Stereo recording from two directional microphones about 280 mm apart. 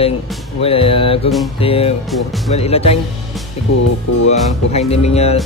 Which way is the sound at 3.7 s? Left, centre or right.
Left.